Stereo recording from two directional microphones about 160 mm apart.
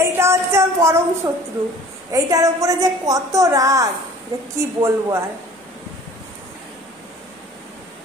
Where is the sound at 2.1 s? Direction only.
20° right (ahead or behind).